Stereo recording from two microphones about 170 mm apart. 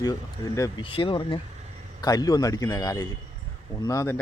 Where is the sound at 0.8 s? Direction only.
30° left (ahead or behind).